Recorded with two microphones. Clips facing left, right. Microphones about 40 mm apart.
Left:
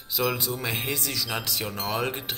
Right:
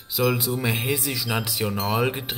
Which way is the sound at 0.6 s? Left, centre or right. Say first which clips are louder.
Right 4 dB; centre.